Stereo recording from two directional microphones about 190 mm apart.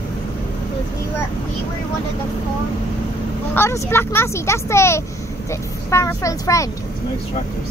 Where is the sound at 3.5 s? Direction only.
15° left (ahead or behind).